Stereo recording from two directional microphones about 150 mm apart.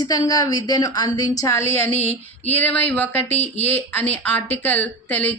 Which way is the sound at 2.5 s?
10° left (ahead or behind).